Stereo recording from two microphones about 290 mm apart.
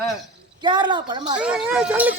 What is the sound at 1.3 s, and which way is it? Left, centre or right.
Speech, centre.